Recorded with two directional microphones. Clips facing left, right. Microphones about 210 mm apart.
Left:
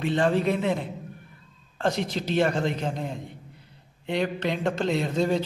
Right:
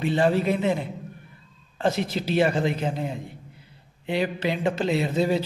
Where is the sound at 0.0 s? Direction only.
5° right (ahead or behind).